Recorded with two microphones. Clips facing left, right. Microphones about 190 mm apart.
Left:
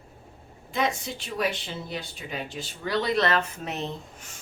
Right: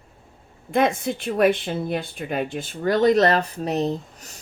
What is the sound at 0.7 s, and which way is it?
Speech, 55° right (ahead or behind).